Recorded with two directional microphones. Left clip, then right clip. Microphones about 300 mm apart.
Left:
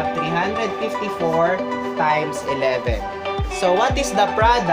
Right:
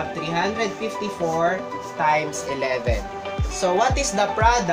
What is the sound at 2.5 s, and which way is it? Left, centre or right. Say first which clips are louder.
Speech: left 2 dB; centre.